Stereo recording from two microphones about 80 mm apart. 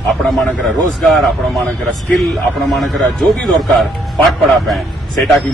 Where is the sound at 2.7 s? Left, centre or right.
Centre.